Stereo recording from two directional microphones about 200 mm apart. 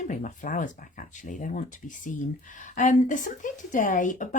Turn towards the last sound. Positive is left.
turn(degrees=40)  # may be behind; listen again after turning